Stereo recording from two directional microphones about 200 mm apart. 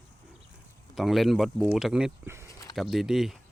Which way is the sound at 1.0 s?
Centre (ahead or behind).